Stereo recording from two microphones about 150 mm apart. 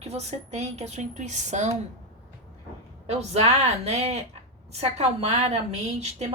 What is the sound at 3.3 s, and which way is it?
A woman's voice, 45° right (ahead or behind).